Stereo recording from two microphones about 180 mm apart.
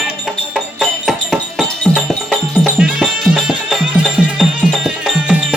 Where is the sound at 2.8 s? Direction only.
5° right (ahead or behind).